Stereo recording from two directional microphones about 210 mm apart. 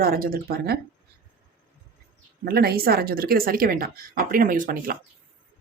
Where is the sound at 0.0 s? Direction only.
45° right (ahead or behind).